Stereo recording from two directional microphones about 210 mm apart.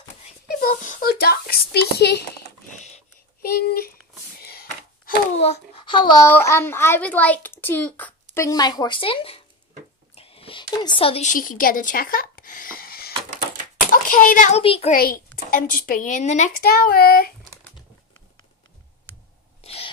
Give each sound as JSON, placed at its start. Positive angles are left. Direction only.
{"t": 0.1, "sound": "speech", "side_deg": 45}
{"t": 3.4, "sound": "a woman's voice", "side_deg": 45}
{"t": 4.4, "sound": "a sound", "side_deg": 45}
{"t": 5.4, "sound": "a child's voice", "side_deg": 25}
{"t": 10.1, "sound": "a sound", "side_deg": 25}
{"t": 14.0, "sound": "a child's voice", "side_deg": 40}
{"t": 14.6, "sound": "a child's voice", "side_deg": 30}
{"t": 15.0, "sound": "a woman's voice", "side_deg": 45}
{"t": 19.6, "sound": "owl", "side_deg": 30}